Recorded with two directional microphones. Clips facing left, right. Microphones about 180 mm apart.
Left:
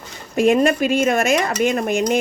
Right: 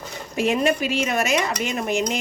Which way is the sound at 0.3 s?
50° left (ahead or behind).